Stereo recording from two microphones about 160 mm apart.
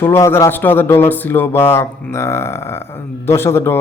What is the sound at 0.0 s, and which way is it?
A man's voice, 15° left (ahead or behind).